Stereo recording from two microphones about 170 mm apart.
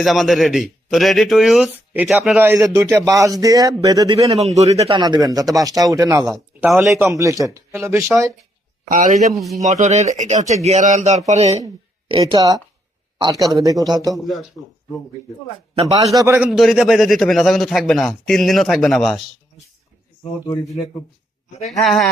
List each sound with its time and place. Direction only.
0.0 s a man's voice: centre (ahead or behind)
2.4 s speech: 15° right (ahead or behind)
4.3 s speech: 40° right (ahead or behind)
4.9 s speech: 25° right (ahead or behind)
6.6 s a man's voice: 5° right (ahead or behind)
6.9 s speech: 15° right (ahead or behind)
8.9 s speech: 50° right (ahead or behind)
9.3 s a man's voice: centre (ahead or behind)
9.6 s speech: 40° right (ahead or behind)
11.6 s speech: 25° right (ahead or behind)
16.1 s speech: 15° right (ahead or behind)
16.4 s a man's voice: centre (ahead or behind)
20.5 s speech: 20° left (ahead or behind)
21.7 s a man's voice: centre (ahead or behind)